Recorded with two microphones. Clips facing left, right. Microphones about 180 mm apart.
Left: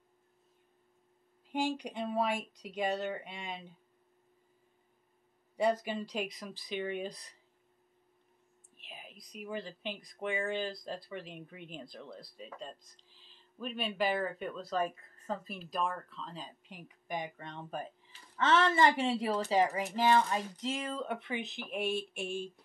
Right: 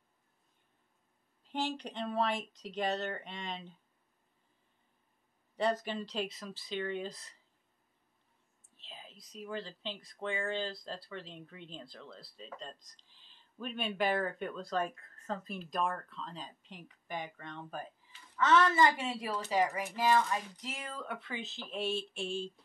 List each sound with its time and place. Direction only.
1.5 s speech: 10° left (ahead or behind)
5.6 s speech: 10° left (ahead or behind)
8.7 s speech: 15° left (ahead or behind)